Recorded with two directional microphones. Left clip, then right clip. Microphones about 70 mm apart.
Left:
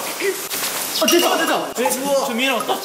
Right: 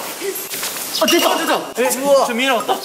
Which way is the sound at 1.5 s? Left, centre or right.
Right.